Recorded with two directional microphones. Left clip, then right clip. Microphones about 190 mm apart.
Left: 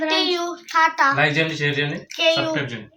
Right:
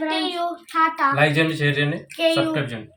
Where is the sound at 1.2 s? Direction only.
40° right (ahead or behind).